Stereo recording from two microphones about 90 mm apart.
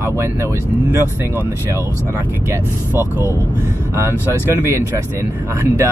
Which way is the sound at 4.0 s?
25° right (ahead or behind).